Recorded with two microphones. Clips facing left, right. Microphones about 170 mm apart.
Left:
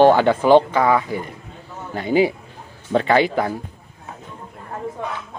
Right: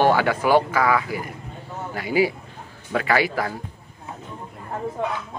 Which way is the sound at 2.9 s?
30° left (ahead or behind).